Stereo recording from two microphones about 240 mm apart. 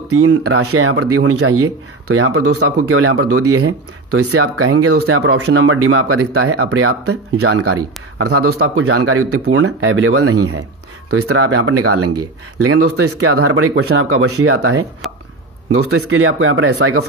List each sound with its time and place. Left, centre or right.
0.1 s speech: right
15.9 s speech: right